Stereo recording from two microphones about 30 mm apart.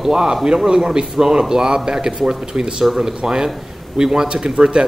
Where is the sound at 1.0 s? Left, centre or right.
Centre.